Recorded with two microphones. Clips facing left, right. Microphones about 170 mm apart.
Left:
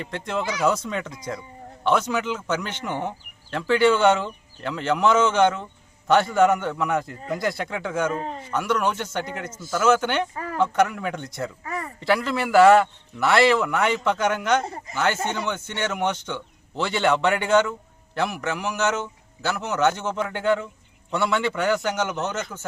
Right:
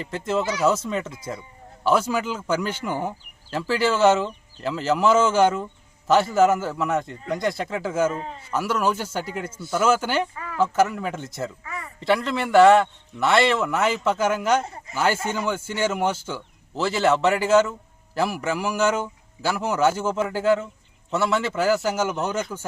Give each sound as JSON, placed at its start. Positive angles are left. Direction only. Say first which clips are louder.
{"t": 0.0, "sound": "a man's voice", "louder": "right 3 dB", "side_deg": 0}
{"t": 10.3, "sound": "a sound", "louder": "left 4 dB", "side_deg": 40}
{"t": 10.6, "sound": "a man's voice", "louder": "right 1 dB", "side_deg": -5}
{"t": 11.6, "sound": "a sound", "louder": "left 5 dB", "side_deg": 40}
{"t": 11.9, "sound": "a man's voice", "louder": "right 1 dB", "side_deg": 0}
{"t": 14.6, "sound": "speech", "louder": "left 3 dB", "side_deg": 35}
{"t": 14.9, "sound": "a man's voice", "louder": "right 1 dB", "side_deg": -10}